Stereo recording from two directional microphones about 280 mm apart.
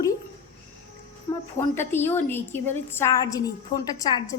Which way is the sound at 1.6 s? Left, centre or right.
Centre.